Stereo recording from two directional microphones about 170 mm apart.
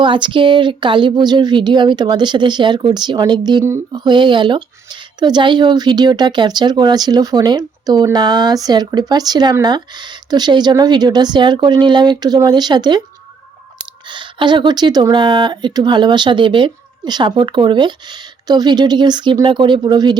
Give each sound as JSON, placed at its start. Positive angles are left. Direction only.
{"t": 0.0, "sound": "speech", "side_deg": -30}
{"t": 14.1, "sound": "speech", "side_deg": -30}